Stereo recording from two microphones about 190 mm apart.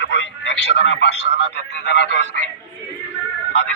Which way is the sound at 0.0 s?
70° left (ahead or behind).